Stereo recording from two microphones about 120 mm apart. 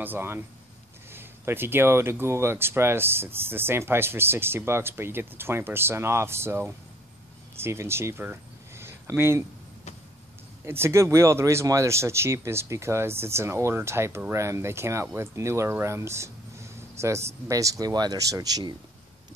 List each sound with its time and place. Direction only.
0.0 s speech: 15° right (ahead or behind)
10.6 s speech: 20° right (ahead or behind)